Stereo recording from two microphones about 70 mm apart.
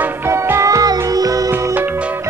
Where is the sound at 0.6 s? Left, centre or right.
Right.